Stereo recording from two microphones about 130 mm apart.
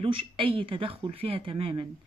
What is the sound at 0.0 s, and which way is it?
Speech, 45° right (ahead or behind).